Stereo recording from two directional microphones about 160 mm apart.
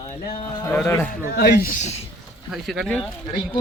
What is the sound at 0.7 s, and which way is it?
Speech, 10° left (ahead or behind).